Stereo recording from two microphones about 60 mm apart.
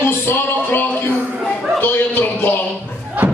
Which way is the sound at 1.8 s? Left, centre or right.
Left.